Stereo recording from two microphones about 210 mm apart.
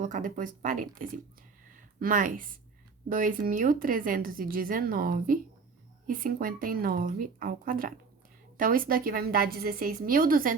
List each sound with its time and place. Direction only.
0.0 s speech: 40° right (ahead or behind)
1.6 s a sound: 40° right (ahead or behind)
3.1 s a woman's voice: 40° right (ahead or behind)